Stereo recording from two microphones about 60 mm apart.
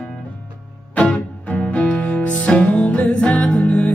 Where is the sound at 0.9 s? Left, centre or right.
Left.